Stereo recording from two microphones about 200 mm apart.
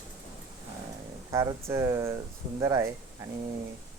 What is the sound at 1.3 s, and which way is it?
Speech, 15° right (ahead or behind).